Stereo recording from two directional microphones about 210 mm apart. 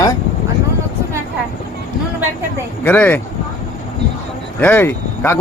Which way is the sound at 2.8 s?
10° left (ahead or behind).